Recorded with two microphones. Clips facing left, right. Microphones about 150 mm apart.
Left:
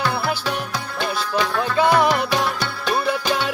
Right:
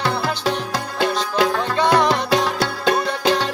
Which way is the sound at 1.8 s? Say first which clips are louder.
Even; 5° left (ahead or behind).